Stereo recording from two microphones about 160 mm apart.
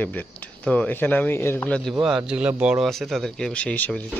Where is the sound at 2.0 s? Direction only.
5° right (ahead or behind).